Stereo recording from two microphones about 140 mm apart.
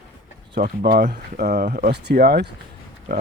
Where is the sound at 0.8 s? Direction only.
90° right.